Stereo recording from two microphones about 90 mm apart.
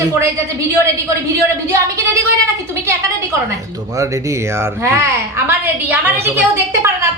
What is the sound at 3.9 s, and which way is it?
A woman's voice, 35° right (ahead or behind).